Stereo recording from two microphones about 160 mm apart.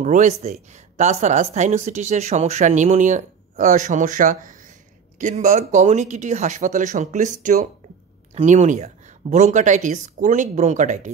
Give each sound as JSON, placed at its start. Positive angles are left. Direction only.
{"t": 0.0, "sound": "speech", "side_deg": -50}